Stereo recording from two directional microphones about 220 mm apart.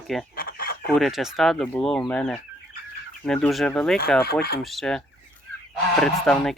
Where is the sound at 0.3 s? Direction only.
40° left (ahead or behind).